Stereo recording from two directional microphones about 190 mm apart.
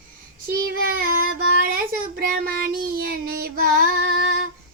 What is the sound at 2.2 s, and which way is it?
Child singing, 50° right (ahead or behind).